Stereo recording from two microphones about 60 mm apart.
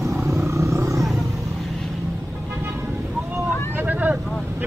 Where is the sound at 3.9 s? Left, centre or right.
Right.